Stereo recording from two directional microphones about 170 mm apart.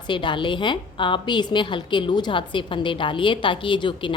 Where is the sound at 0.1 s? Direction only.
30° left (ahead or behind).